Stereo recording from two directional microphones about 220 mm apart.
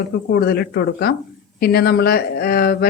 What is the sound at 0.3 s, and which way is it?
Speech, 45° left (ahead or behind).